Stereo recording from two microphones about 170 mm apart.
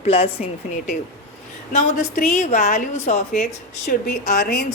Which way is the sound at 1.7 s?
50° left (ahead or behind).